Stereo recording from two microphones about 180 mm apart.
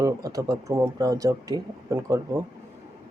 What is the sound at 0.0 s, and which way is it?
Speech, 20° right (ahead or behind).